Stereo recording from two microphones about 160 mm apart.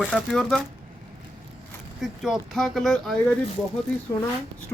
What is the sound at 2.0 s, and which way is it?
Speech, centre (ahead or behind).